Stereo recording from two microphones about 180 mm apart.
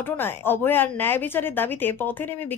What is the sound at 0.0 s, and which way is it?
Speech, 10° left (ahead or behind).